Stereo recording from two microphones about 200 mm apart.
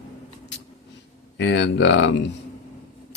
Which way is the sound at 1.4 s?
60° left (ahead or behind).